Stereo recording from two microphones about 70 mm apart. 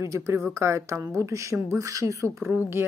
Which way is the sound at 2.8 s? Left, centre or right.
Right.